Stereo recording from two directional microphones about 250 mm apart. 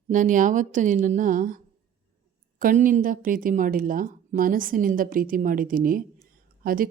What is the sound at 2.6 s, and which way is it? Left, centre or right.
Speech, right.